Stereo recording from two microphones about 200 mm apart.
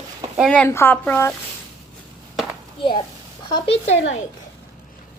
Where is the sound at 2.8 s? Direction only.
25° left (ahead or behind).